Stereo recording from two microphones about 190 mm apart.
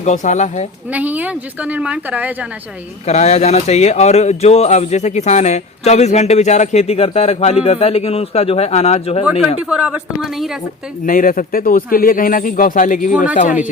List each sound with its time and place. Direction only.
0.0 s speech: 40° left (ahead or behind)
0.9 s a woman's voice: 10° right (ahead or behind)
3.1 s speech: 35° left (ahead or behind)
9.6 s speech: 5° right (ahead or behind)
11.0 s speech: 45° left (ahead or behind)